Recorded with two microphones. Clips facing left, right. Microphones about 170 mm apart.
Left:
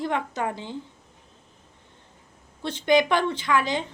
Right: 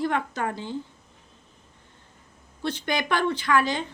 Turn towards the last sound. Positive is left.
turn(degrees=20)  # may be behind; listen again after turning